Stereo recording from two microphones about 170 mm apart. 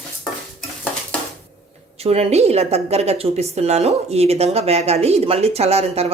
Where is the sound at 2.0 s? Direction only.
35° right (ahead or behind).